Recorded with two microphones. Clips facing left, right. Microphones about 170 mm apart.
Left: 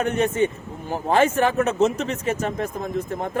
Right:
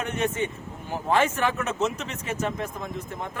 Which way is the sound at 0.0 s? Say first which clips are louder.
Left 6 dB; 40° left (ahead or behind).